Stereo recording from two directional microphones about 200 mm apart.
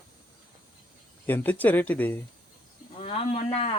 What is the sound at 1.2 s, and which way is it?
Speech, 10° left (ahead or behind).